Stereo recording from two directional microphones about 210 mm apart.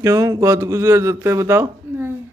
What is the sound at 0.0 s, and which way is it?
Speech, 15° right (ahead or behind).